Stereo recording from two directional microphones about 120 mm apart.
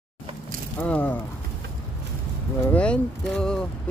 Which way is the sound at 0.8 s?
10° left (ahead or behind).